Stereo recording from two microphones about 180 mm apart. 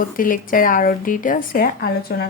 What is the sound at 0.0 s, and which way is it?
A woman's voice, 50° left (ahead or behind).